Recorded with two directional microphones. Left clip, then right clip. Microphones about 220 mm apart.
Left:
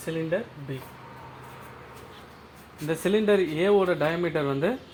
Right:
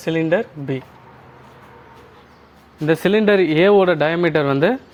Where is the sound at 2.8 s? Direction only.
35° right (ahead or behind).